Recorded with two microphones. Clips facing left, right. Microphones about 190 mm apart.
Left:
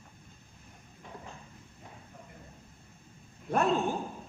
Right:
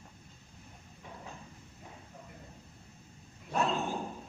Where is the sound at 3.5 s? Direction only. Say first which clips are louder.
Left 3 dB; 55° left (ahead or behind).